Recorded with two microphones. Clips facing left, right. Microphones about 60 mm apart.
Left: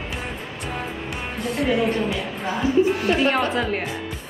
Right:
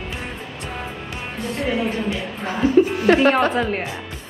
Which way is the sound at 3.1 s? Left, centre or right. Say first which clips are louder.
Right 6 dB; right.